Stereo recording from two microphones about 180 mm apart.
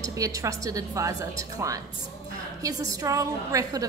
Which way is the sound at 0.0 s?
20° right (ahead or behind).